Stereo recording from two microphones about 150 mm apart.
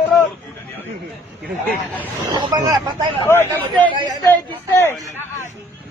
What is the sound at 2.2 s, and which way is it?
Speech, 25° right (ahead or behind).